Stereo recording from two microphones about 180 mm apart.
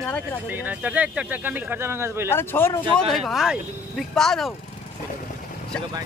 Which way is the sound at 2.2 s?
15° left (ahead or behind).